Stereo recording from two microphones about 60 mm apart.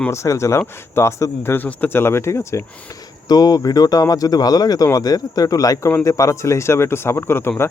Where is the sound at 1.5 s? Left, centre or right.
Left.